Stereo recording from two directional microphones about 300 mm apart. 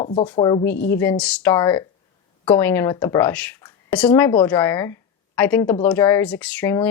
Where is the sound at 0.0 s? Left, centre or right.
Centre.